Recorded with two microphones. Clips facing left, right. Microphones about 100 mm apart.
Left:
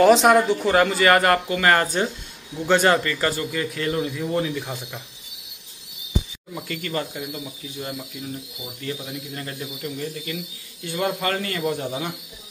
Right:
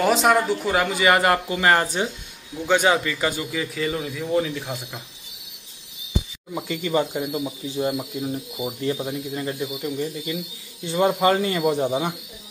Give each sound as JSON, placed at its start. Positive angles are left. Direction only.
{"t": 0.0, "sound": "speech", "side_deg": -5}
{"t": 2.5, "sound": "a man's voice", "side_deg": -5}
{"t": 6.5, "sound": "speech", "side_deg": -15}
{"t": 9.3, "sound": "speech", "side_deg": -10}